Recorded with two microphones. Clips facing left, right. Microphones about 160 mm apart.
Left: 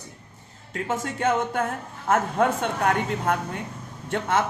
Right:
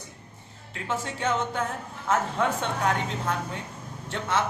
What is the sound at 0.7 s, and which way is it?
Speech, 50° left (ahead or behind).